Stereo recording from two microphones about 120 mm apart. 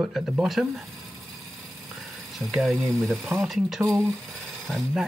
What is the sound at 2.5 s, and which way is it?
Speech, centre (ahead or behind).